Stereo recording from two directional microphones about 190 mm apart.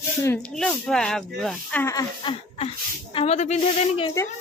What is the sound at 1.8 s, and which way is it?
Speech, 15° left (ahead or behind).